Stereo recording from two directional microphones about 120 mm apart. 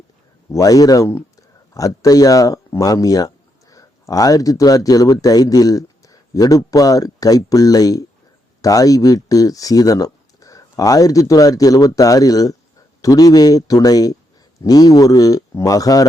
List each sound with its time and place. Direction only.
0.5 s speech: 30° left (ahead or behind)